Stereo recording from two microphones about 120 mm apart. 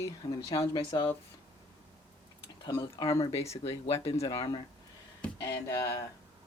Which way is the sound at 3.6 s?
60° left (ahead or behind).